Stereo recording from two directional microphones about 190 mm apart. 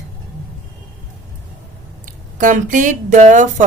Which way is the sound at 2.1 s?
45° right (ahead or behind).